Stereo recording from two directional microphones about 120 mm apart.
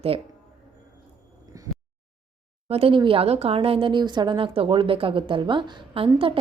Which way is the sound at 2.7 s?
55° right (ahead or behind).